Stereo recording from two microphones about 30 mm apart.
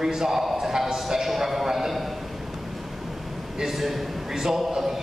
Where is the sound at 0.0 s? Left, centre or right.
Centre.